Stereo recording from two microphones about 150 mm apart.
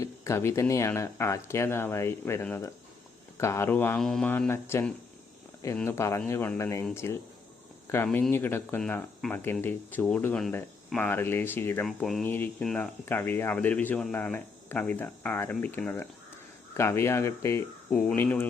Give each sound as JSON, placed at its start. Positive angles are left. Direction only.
{"t": 0.0, "sound": "speech", "side_deg": 20}
{"t": 11.9, "sound": "speech", "side_deg": 0}
{"t": 12.2, "sound": "speech", "side_deg": 10}
{"t": 17.9, "sound": "speech", "side_deg": 5}